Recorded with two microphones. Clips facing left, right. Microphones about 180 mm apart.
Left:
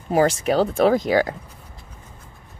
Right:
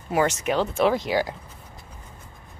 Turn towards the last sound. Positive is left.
turn(degrees=50)  # may be behind; listen again after turning